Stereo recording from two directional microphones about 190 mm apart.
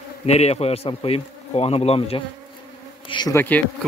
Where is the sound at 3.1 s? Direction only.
25° left (ahead or behind).